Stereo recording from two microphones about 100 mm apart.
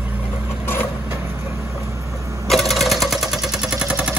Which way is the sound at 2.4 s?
Centre (ahead or behind).